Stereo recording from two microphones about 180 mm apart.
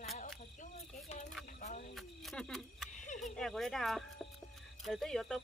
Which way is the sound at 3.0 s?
45° left (ahead or behind).